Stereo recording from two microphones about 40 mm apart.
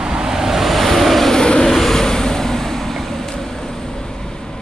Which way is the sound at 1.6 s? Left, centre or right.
Centre.